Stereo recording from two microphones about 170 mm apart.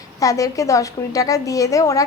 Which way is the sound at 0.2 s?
20° left (ahead or behind).